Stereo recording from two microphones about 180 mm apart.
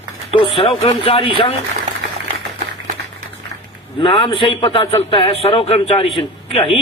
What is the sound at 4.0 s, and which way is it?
A man's voice, 25° left (ahead or behind).